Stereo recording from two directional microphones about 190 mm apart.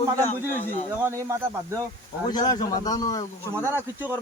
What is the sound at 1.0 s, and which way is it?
Speech, 15° right (ahead or behind).